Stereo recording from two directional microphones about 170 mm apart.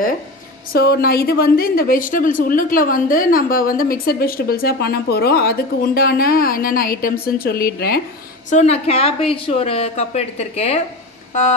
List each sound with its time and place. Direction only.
0.7 s a woman's voice: 65° left (ahead or behind)
8.5 s a woman's voice: 40° left (ahead or behind)